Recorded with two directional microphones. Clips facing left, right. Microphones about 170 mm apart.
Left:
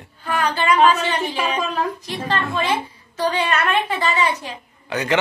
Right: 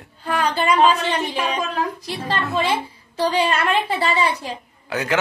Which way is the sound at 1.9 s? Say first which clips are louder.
Left 1 dB; 35° right (ahead or behind).